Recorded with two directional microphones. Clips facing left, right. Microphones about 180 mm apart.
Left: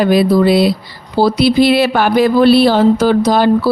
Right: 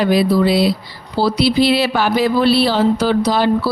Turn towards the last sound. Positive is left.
turn(degrees=45)  # may be behind; listen again after turning